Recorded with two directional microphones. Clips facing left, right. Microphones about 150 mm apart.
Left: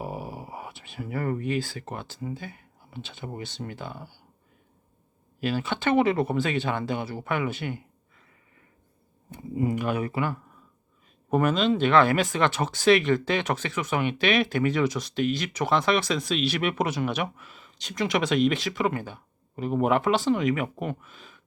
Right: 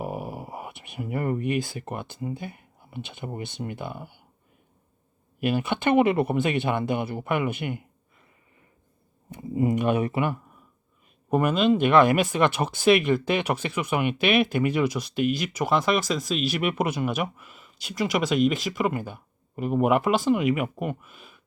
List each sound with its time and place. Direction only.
0.5 s speech: 15° right (ahead or behind)
5.5 s speech: 15° right (ahead or behind)
9.6 s speech: 20° right (ahead or behind)